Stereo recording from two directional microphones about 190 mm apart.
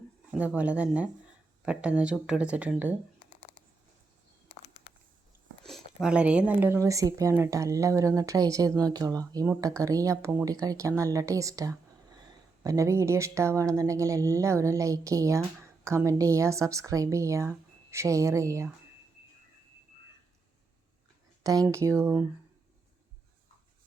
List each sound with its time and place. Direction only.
0.3 s speech: 10° right (ahead or behind)
4.9 s a sound: 30° left (ahead or behind)
5.6 s speech: centre (ahead or behind)
21.4 s speech: 20° right (ahead or behind)